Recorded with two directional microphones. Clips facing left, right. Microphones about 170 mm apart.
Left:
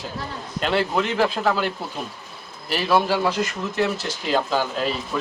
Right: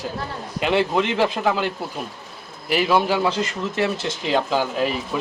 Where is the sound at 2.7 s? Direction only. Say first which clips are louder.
Right 1 dB; 10° right (ahead or behind).